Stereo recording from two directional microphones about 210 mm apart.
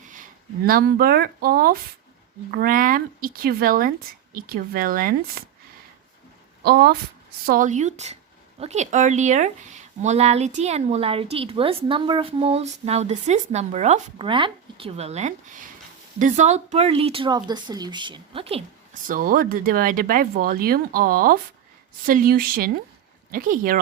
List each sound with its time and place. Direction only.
0.1 s speech: 40° right (ahead or behind)
6.6 s speech: 45° right (ahead or behind); by 18.6 s 25° right (ahead or behind)
19.0 s speech: 40° right (ahead or behind)